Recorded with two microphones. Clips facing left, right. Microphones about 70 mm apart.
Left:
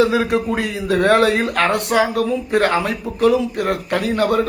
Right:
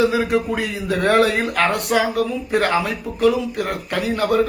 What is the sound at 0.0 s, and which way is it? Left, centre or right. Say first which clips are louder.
A man's voice: left 2 dB; left.